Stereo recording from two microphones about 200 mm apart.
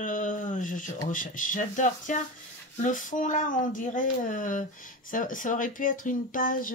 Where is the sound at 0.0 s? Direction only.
40° left (ahead or behind).